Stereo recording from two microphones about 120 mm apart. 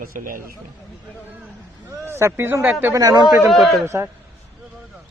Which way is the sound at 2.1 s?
20° right (ahead or behind).